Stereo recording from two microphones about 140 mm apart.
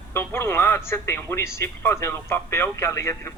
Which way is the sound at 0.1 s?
15° left (ahead or behind).